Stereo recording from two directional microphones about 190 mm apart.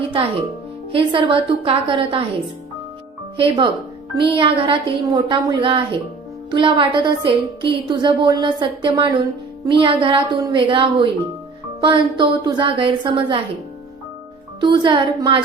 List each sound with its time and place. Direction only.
0.9 s speech: 25° right (ahead or behind)
3.3 s speech: 30° right (ahead or behind)
14.6 s speech: 25° right (ahead or behind)